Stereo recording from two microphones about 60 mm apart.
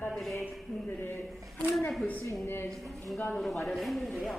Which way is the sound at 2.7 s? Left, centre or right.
Centre.